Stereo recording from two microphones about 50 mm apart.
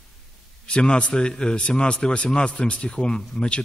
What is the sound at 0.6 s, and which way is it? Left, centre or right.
A man's voice, centre.